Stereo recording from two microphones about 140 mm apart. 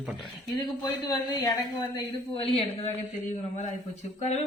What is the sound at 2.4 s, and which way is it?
Speech, 40° left (ahead or behind).